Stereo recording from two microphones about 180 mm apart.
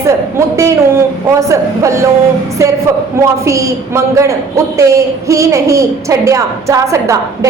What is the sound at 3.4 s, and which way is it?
A man's voice, 15° right (ahead or behind).